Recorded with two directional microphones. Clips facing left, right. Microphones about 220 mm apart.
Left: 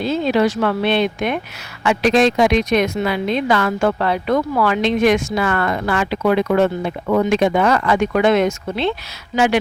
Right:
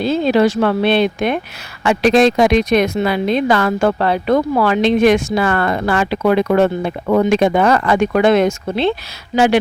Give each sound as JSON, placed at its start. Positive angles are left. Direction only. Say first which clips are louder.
{"t": 0.0, "sound": "speech", "louder": "right 3 dB", "side_deg": -35}